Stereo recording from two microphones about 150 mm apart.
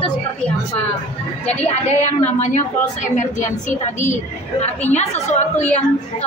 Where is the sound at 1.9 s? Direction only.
50° left (ahead or behind).